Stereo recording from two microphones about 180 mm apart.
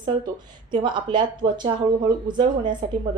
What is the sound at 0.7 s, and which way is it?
A woman's voice, 25° right (ahead or behind).